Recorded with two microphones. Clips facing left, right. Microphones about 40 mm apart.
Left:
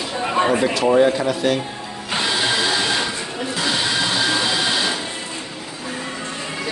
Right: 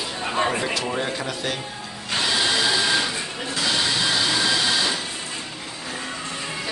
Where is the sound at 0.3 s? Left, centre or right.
Centre.